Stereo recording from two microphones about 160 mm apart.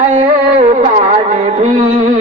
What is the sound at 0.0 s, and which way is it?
Carnatic music, 45° right (ahead or behind).